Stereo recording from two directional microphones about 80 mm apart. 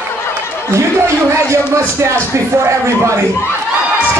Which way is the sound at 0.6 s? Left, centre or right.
Right.